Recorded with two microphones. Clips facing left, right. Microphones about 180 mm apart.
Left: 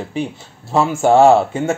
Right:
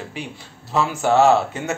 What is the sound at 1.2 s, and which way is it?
Speech, 30° left (ahead or behind).